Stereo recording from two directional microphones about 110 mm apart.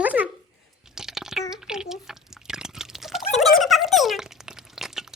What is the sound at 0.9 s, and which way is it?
Liquid, 5° right (ahead or behind).